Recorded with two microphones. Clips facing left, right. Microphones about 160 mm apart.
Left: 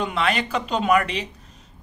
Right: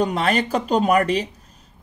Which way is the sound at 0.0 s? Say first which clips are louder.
Right 3 dB; 40° right (ahead or behind).